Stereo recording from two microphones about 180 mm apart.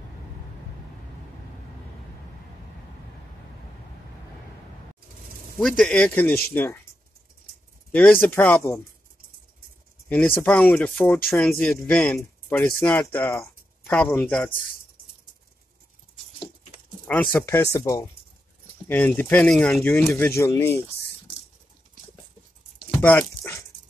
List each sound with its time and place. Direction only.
5.6 s speech: centre (ahead or behind)
7.9 s speech: 10° left (ahead or behind)
10.0 s speech: 10° left (ahead or behind)
17.0 s speech: 10° left (ahead or behind)
23.0 s dog: 15° left (ahead or behind)